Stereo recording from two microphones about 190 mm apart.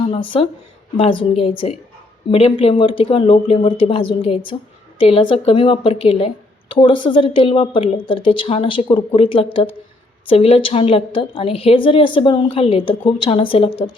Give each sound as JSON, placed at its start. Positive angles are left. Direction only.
{"t": 0.1, "sound": "a woman's voice", "side_deg": 25}